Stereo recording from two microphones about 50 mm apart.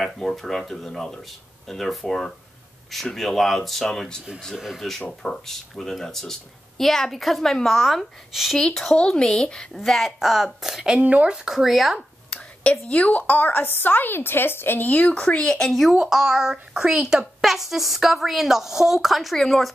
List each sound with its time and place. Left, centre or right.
0.0 s a woman's voice: centre
8.5 s speech: centre
9.8 s a woman's voice: centre
10.1 s a child's voice: centre
11.0 s speech: right
11.2 s a child's voice: centre
12.8 s a woman's voice: left
14.9 s speech: left
15.5 s a woman's voice: centre
16.0 s a child's voice: centre